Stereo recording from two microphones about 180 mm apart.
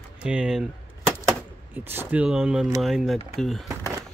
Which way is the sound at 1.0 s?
15° right (ahead or behind).